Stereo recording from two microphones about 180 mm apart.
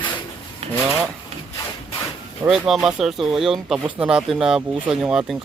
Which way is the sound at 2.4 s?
5° right (ahead or behind).